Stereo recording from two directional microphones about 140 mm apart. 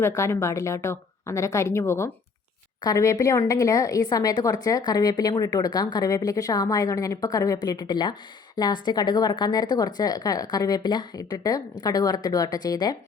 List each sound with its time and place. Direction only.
0.0 s a woman's voice: 20° left (ahead or behind)